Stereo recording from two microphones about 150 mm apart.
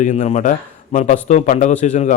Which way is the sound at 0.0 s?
55° left (ahead or behind).